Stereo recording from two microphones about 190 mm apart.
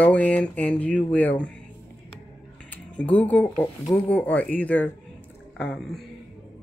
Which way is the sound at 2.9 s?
5° left (ahead or behind).